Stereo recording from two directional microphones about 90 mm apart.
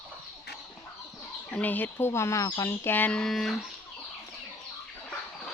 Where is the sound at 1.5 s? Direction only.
20° left (ahead or behind); by 2.6 s 35° left (ahead or behind).